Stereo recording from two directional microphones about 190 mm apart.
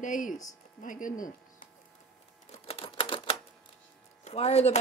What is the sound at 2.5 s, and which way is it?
Typewriter, 30° left (ahead or behind).